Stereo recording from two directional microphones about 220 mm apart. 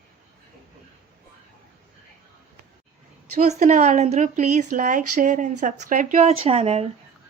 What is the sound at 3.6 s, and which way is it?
A woman's voice, 35° right (ahead or behind).